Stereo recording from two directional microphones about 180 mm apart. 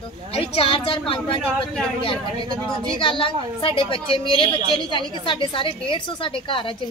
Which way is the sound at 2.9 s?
30° left (ahead or behind).